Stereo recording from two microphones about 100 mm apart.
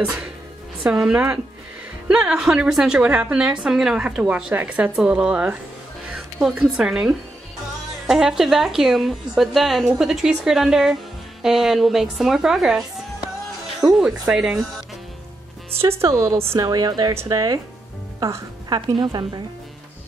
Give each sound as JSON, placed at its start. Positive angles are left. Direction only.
{"t": 0.0, "sound": "a woman's voice", "side_deg": -10}
{"t": 15.8, "sound": "a woman's voice", "side_deg": -25}
{"t": 16.6, "sound": "a woman's voice", "side_deg": -40}
{"t": 17.1, "sound": "a woman's voice", "side_deg": -30}